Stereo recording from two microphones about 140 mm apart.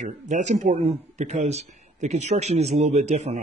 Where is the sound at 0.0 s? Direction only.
60° right (ahead or behind).